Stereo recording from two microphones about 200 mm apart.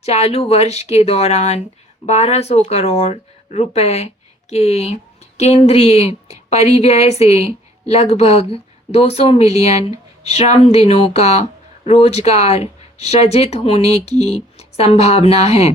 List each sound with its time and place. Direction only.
0.0 s speech: 30° left (ahead or behind)